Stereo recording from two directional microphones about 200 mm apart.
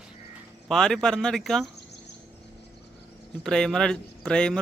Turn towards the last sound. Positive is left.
turn(degrees=5)  # may be behind; listen again after turning